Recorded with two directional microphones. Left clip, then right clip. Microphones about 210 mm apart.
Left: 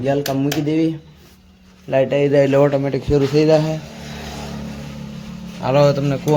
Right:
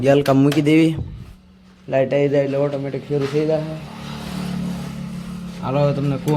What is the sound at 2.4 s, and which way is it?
A man's voice, 25° left (ahead or behind).